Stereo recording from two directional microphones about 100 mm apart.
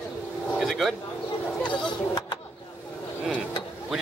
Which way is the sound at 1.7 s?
50° left (ahead or behind).